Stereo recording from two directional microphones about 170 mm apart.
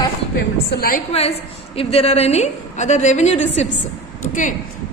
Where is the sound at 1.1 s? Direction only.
35° left (ahead or behind).